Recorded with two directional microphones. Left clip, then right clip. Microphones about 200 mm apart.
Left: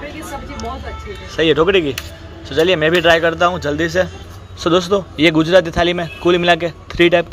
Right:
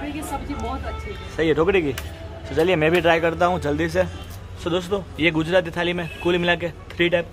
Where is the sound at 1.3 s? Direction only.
10° left (ahead or behind).